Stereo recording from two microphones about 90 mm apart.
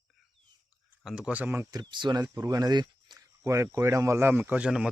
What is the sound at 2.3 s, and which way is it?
Speech, 40° right (ahead or behind).